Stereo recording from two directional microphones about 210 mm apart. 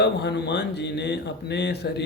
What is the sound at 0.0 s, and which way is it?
Speech, 55° left (ahead or behind).